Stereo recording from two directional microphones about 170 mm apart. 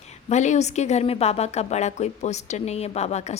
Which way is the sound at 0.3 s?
45° left (ahead or behind).